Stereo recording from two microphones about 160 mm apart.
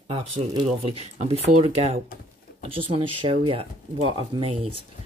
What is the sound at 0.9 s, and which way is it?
Speech, 45° right (ahead or behind).